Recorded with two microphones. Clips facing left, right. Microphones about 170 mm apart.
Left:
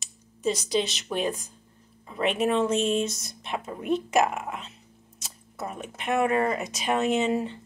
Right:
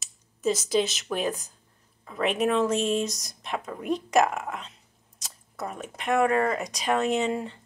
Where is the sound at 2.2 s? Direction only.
Centre (ahead or behind).